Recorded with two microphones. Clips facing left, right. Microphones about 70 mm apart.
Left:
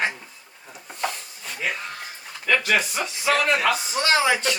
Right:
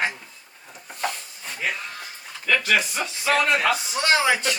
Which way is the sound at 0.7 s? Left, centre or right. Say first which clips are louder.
Even; centre.